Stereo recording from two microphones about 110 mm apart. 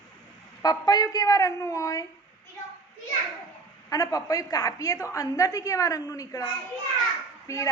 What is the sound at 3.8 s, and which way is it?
A woman's voice, 30° left (ahead or behind).